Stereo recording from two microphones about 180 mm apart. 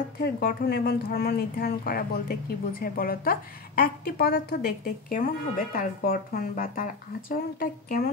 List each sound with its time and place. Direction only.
0.2 s a woman's voice: 55° left (ahead or behind)